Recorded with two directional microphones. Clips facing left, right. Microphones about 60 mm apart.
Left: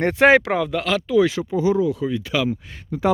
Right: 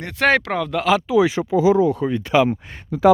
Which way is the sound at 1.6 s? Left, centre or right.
Right.